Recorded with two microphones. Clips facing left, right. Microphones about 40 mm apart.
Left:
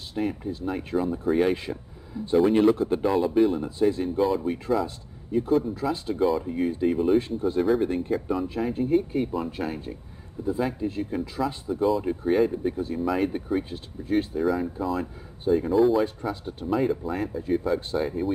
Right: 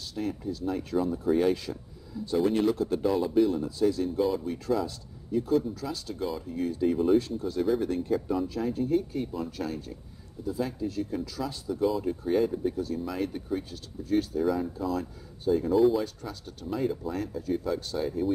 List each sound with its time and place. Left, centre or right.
0.1 s speech: left
15.7 s speech: centre
16.0 s speech: left
16.7 s speech: centre